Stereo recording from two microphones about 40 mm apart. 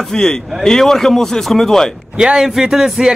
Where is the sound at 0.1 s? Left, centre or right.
Centre.